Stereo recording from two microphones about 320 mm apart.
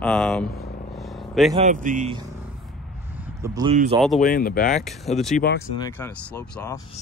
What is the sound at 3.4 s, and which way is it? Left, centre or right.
Speech, centre.